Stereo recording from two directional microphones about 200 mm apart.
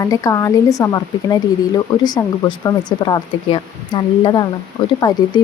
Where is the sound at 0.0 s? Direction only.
15° left (ahead or behind).